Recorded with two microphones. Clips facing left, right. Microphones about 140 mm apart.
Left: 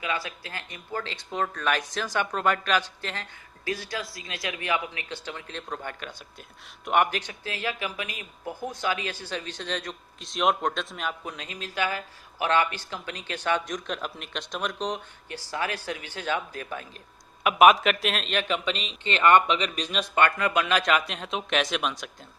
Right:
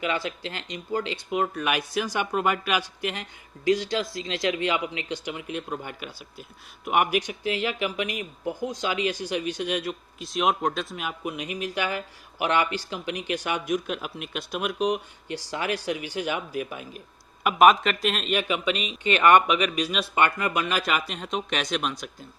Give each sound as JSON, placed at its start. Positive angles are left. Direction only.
{"t": 0.0, "sound": "speech", "side_deg": -25}
{"t": 17.4, "sound": "a man's voice", "side_deg": 0}